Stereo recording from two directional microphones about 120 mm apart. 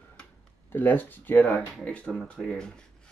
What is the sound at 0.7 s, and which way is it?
Speech, 15° left (ahead or behind).